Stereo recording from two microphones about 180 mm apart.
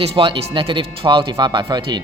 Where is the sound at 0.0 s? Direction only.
30° right (ahead or behind).